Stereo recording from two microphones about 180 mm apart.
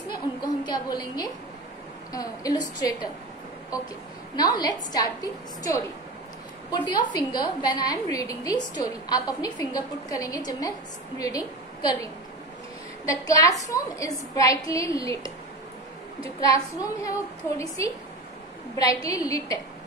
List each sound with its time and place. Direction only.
0.7 s a woman's voice: 20° left (ahead or behind)
4.4 s a woman's voice: 20° left (ahead or behind)
16.3 s a woman's voice: 20° left (ahead or behind)